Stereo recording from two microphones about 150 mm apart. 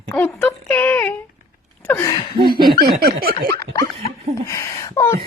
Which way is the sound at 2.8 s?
90° right.